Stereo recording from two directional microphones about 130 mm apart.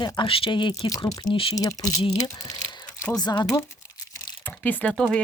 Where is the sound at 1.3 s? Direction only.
45° left (ahead or behind).